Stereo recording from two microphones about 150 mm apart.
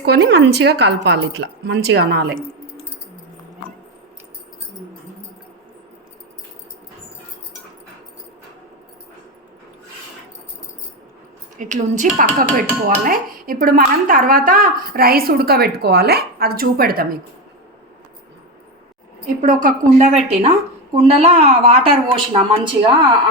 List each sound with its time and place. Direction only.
0.0 s a woman's voice: 90° right
11.5 s speech: 55° right (ahead or behind); by 17.1 s 80° right
19.4 s a woman's voice: 65° right (ahead or behind)
20.1 s a woman's voice: 45° right (ahead or behind)